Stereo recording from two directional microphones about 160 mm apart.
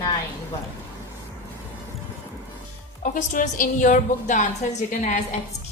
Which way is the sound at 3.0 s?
55° left (ahead or behind).